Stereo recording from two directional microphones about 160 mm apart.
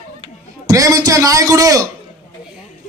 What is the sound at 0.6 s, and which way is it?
A man's voice, 20° right (ahead or behind).